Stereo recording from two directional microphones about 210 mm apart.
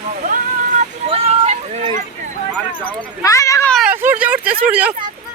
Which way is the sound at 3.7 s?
5° right (ahead or behind).